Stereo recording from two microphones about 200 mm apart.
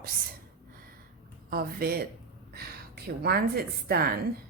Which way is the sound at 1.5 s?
50° right (ahead or behind).